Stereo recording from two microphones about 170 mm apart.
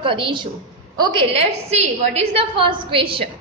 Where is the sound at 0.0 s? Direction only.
30° right (ahead or behind).